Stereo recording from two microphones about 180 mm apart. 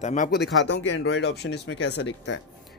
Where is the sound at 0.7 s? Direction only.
75° left (ahead or behind).